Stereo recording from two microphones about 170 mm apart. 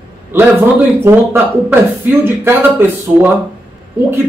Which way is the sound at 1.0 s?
15° right (ahead or behind).